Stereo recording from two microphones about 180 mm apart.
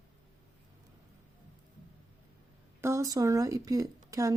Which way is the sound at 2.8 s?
15° right (ahead or behind).